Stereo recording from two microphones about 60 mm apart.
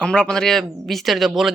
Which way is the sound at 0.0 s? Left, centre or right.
Centre.